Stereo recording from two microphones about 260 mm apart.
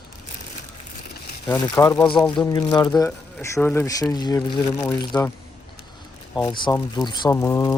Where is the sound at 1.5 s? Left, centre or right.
Centre.